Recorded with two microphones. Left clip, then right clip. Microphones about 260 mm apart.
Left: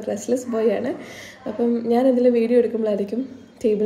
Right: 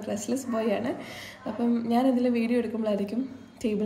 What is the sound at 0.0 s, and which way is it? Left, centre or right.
A woman's voice, centre.